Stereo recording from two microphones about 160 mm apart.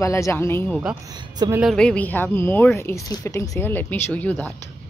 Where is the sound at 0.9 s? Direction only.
25° right (ahead or behind).